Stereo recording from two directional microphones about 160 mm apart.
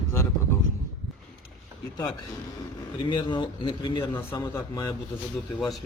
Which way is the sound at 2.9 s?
30° left (ahead or behind).